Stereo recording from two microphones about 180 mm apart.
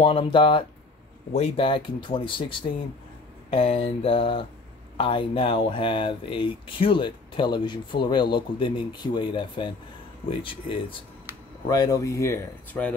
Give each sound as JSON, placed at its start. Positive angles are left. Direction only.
{"t": 0.0, "sound": "speech", "side_deg": 30}
{"t": 3.4, "sound": "mantra", "side_deg": 30}
{"t": 4.9, "sound": "speech", "side_deg": 30}